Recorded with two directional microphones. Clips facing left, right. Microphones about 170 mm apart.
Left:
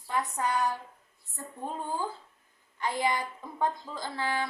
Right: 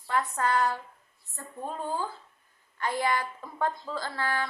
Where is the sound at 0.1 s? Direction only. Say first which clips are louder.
Right 3 dB; 15° left (ahead or behind).